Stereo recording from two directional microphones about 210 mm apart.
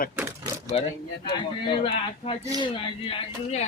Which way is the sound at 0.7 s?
30° left (ahead or behind).